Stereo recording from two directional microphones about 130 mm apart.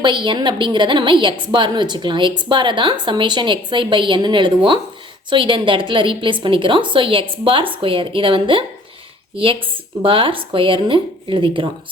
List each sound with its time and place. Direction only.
0.0 s a woman's voice: 40° right (ahead or behind)